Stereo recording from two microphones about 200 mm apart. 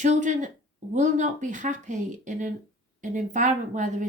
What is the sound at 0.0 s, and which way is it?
Speech, 40° right (ahead or behind).